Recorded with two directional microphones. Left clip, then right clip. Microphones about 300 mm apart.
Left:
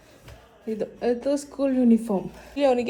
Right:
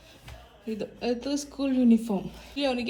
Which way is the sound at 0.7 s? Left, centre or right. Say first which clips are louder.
Left 5 dB; centre.